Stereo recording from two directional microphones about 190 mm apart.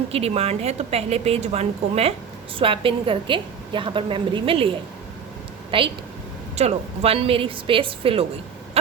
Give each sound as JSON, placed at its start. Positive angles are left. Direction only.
{"t": 0.1, "sound": "a woman's voice", "side_deg": -35}